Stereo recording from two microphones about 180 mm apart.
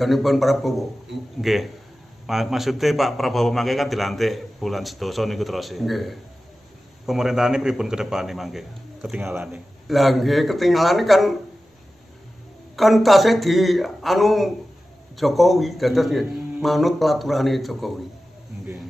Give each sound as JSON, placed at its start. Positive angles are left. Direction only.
{"t": 0.0, "sound": "a man's voice", "side_deg": 0}
{"t": 9.8, "sound": "a man's voice", "side_deg": 0}
{"t": 12.7, "sound": "a man's voice", "side_deg": 0}